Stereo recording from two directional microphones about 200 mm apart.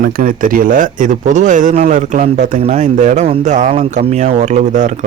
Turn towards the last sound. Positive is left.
turn(degrees=-35)  # may be behind; listen again after turning